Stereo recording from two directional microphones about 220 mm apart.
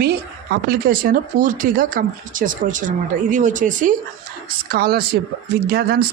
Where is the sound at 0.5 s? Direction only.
45° right (ahead or behind).